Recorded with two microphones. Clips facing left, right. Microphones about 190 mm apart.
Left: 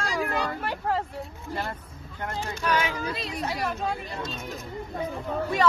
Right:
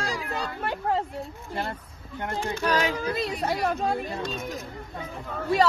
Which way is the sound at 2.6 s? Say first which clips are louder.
Right 1 dB; 35° right (ahead or behind).